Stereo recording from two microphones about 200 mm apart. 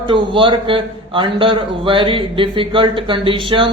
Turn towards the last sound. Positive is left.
turn(degrees=-25)  # may be behind; listen again after turning